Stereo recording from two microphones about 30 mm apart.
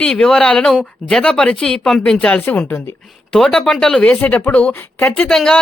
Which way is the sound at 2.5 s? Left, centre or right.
Left.